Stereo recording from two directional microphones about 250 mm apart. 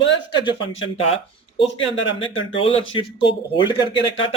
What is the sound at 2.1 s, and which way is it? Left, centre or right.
Speech, left.